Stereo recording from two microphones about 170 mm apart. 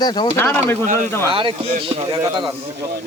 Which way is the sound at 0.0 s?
25° left (ahead or behind).